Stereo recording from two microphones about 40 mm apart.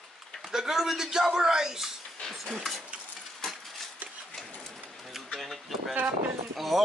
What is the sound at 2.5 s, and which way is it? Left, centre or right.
Speech, centre.